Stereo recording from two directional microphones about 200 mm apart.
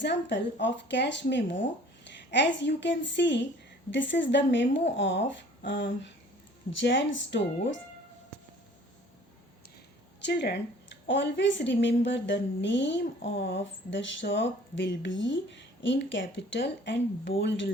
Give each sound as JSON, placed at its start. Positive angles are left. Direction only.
{"t": 0.0, "sound": "a woman's voice", "side_deg": 60}
{"t": 10.2, "sound": "a woman's voice", "side_deg": 60}